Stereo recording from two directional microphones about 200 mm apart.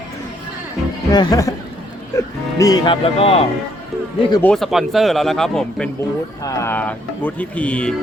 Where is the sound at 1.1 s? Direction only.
20° left (ahead or behind).